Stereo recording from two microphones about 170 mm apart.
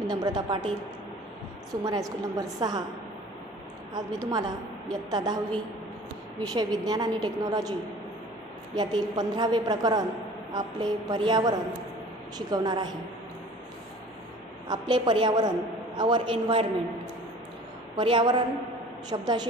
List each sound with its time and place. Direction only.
0.0 s a woman's voice: 25° right (ahead or behind)
1.9 s a woman's voice: 20° right (ahead or behind)
3.9 s a woman's voice: 25° right (ahead or behind)
6.4 s a woman's voice: 25° right (ahead or behind)
8.7 s a woman's voice: 25° right (ahead or behind)
14.7 s a woman's voice: 25° right (ahead or behind)
17.9 s a woman's voice: 25° right (ahead or behind)